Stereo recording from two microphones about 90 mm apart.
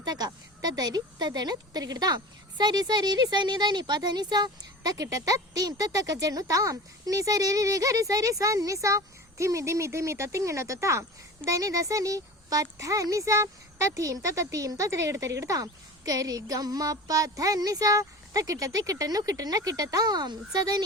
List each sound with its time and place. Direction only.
0.0 s a woman's voice: 50° right (ahead or behind)